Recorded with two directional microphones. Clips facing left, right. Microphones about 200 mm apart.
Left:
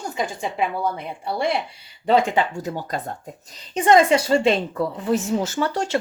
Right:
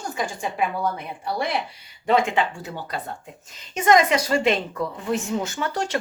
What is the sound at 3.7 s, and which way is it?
Speech, 30° left (ahead or behind).